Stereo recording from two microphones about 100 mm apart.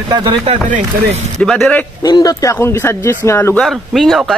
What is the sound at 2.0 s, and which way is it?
Speech, 40° left (ahead or behind).